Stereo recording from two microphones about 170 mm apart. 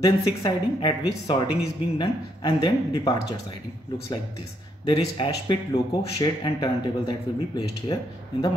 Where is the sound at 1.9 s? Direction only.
25° left (ahead or behind).